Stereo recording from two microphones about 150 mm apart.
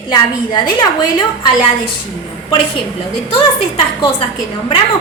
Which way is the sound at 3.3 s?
35° left (ahead or behind).